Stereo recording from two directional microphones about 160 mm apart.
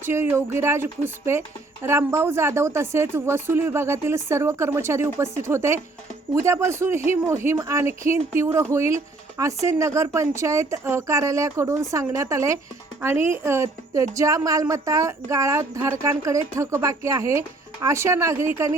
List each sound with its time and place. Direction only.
0.0 s a woman's voice: 15° right (ahead or behind)